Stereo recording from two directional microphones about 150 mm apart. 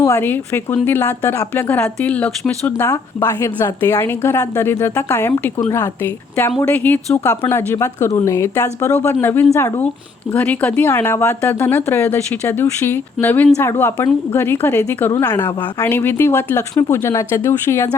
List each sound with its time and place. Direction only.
0.0 s speech: 15° left (ahead or behind)